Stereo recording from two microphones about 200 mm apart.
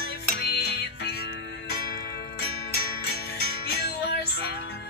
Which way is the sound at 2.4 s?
50° left (ahead or behind).